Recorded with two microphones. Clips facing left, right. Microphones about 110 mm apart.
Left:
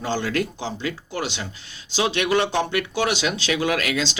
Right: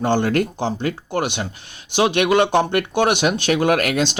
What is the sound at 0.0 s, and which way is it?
Speech, 50° right (ahead or behind).